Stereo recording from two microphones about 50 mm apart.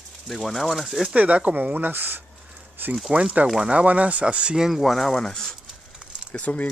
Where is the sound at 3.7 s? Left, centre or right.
Right; by 4.8 s centre.